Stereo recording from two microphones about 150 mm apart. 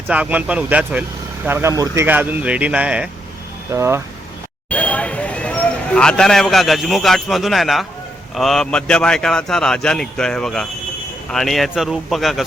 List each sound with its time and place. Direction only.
0.1 s speech: 10° right (ahead or behind)
3.7 s speech: 20° right (ahead or behind)
4.7 s speech: 10° left (ahead or behind)